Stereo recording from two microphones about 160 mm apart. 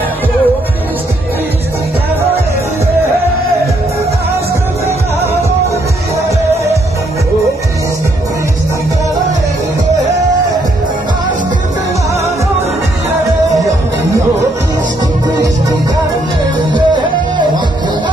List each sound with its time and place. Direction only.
16.7 s music: 30° right (ahead or behind)